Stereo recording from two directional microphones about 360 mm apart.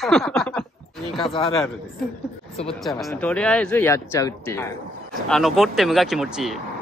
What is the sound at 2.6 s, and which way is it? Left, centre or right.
Speech, centre.